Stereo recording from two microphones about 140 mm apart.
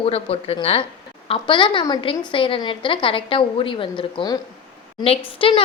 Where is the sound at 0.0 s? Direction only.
45° left (ahead or behind).